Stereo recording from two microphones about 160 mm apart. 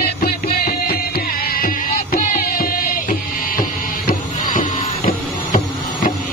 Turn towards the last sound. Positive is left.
turn(degrees=45)  # may be behind; listen again after turning